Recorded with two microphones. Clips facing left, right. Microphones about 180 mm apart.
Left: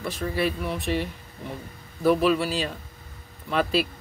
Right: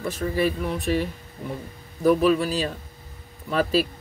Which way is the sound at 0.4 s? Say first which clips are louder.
Right 3 dB; 45° right (ahead or behind).